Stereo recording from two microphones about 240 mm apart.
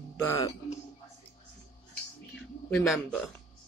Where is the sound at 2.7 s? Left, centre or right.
Centre.